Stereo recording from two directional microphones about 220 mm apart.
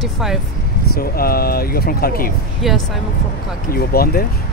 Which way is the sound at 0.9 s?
45° left (ahead or behind).